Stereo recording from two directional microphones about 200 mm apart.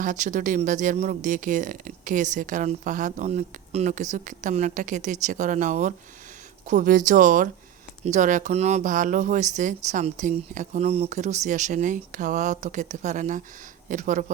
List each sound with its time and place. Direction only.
0.0 s speech: 40° right (ahead or behind)